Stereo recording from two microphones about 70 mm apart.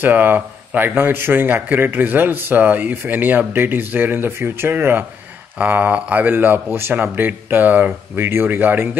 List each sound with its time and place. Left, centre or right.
0.0 s speech: right